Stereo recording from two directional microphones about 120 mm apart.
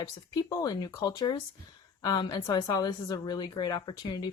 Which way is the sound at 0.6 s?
30° left (ahead or behind).